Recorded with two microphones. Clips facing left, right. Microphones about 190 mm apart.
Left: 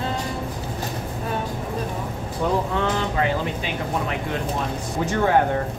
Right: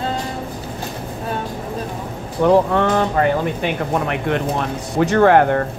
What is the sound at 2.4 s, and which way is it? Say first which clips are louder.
Speech: right 9 dB; 65° right (ahead or behind).